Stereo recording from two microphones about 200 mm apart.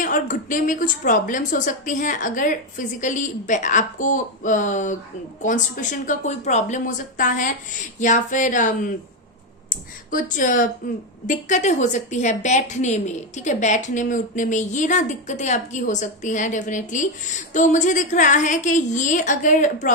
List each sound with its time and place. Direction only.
0.0 s a woman's voice: 40° left (ahead or behind)
10.1 s a woman's voice: 40° left (ahead or behind)